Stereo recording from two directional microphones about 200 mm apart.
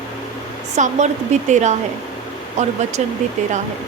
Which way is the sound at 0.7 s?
35° right (ahead or behind).